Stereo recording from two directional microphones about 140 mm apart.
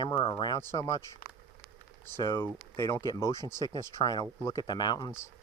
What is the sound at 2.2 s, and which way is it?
Speech, 30° left (ahead or behind).